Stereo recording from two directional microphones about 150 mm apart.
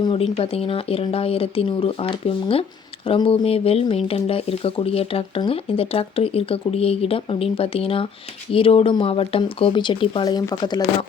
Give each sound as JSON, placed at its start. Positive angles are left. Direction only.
{"t": 0.0, "sound": "speech", "side_deg": 40}